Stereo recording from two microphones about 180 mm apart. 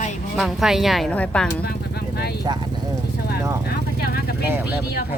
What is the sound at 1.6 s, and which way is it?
Speech, 60° left (ahead or behind).